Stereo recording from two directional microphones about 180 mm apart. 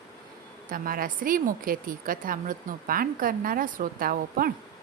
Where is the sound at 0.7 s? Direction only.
50° right (ahead or behind).